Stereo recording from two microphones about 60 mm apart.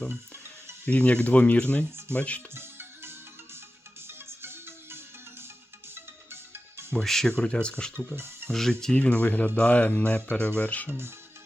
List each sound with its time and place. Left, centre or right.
0.9 s speech: left
2.6 s music: right
6.9 s speech: centre
7.3 s speech: centre
7.9 s speech: right
8.4 s speech: centre
9.0 s speech: left